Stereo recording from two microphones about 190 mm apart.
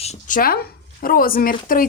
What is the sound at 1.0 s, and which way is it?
Speech, 50° left (ahead or behind).